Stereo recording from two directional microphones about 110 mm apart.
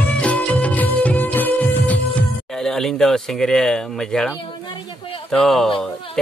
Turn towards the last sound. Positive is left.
turn(degrees=5)  # may be behind; listen again after turning